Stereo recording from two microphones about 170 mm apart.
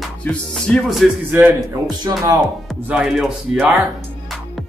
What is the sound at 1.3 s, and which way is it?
Speech, 10° right (ahead or behind).